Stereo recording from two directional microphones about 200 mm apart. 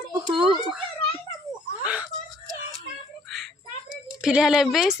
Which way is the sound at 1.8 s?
5° right (ahead or behind).